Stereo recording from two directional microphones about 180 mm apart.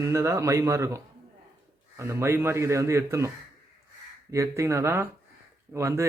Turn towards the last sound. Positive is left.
turn(degrees=-15)  # may be behind; listen again after turning